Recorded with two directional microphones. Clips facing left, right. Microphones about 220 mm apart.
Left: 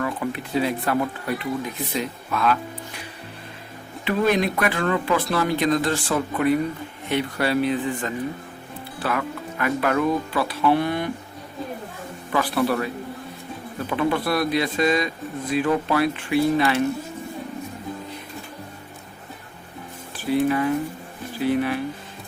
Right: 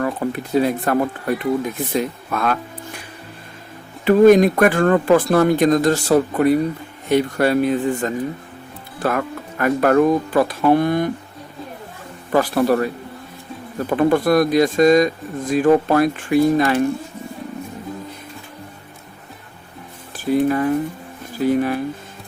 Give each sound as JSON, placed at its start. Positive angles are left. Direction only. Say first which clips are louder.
{"t": 0.0, "sound": "speech", "louder": "right 4 dB", "side_deg": -40}
{"t": 4.0, "sound": "speech", "louder": "right 10 dB", "side_deg": -45}
{"t": 12.3, "sound": "speech", "louder": "right 6 dB", "side_deg": -45}
{"t": 13.9, "sound": "speech", "louder": "right 7 dB", "side_deg": -45}
{"t": 20.1, "sound": "speech", "louder": "right 3 dB", "side_deg": -45}